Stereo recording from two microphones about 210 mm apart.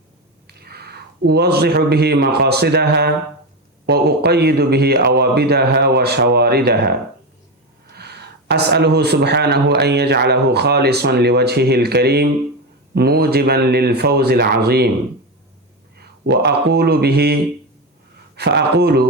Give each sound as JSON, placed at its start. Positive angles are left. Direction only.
{"t": 0.4, "sound": "a man's voice", "side_deg": -50}
{"t": 7.9, "sound": "speech", "side_deg": -50}
{"t": 16.2, "sound": "speech", "side_deg": -50}